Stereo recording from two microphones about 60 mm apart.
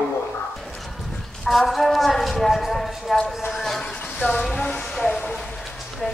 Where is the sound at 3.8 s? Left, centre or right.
Centre.